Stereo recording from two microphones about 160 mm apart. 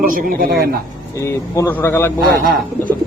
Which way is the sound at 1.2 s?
15° left (ahead or behind).